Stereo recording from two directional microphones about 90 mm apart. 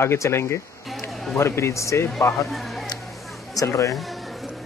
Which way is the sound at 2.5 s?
Centre (ahead or behind).